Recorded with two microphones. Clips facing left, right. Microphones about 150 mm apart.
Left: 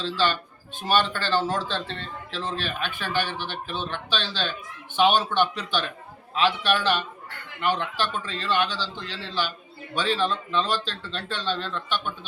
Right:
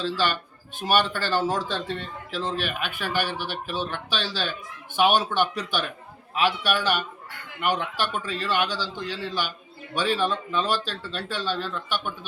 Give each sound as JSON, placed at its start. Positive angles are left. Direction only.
{"t": 0.0, "sound": "speech", "side_deg": -10}